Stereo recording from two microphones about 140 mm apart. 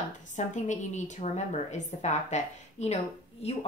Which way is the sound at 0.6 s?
60° left (ahead or behind).